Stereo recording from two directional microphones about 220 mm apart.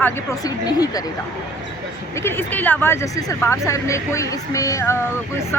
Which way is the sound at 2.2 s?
10° left (ahead or behind).